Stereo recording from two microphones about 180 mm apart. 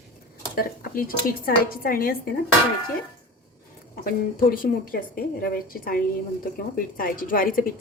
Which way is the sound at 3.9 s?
50° left (ahead or behind).